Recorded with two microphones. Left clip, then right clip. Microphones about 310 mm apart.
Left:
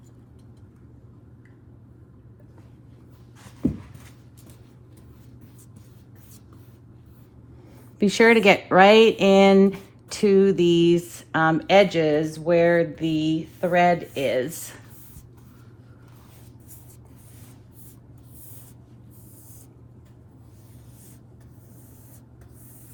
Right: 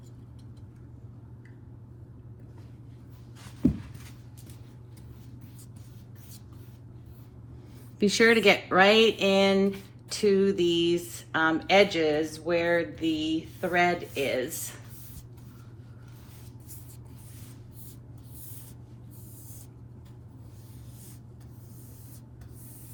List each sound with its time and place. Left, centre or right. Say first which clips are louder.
7.9 s speech: left 5 dB; left